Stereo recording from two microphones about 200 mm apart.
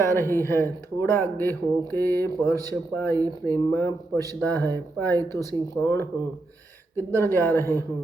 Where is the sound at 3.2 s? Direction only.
20° right (ahead or behind).